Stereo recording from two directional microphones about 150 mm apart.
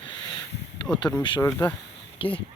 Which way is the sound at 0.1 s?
30° left (ahead or behind).